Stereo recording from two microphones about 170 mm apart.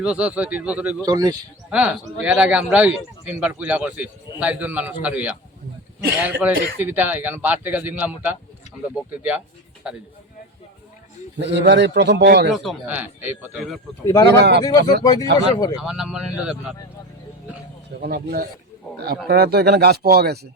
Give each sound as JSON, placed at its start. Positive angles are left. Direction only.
{"t": 0.0, "sound": "speech", "side_deg": -5}
{"t": 1.0, "sound": "speech", "side_deg": -25}
{"t": 1.7, "sound": "speech", "side_deg": -10}
{"t": 6.4, "sound": "speech", "side_deg": -10}
{"t": 11.3, "sound": "a man's voice", "side_deg": -90}
{"t": 12.5, "sound": "speech", "side_deg": -5}
{"t": 14.0, "sound": "speech", "side_deg": 20}
{"t": 14.3, "sound": "speech", "side_deg": -80}
{"t": 15.0, "sound": "speech", "side_deg": 20}
{"t": 15.8, "sound": "speech", "side_deg": -5}
{"t": 18.0, "sound": "speech", "side_deg": -65}